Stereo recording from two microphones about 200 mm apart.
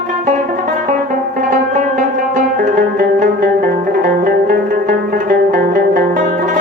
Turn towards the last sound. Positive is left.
turn(degrees=-45)  # may be behind; listen again after turning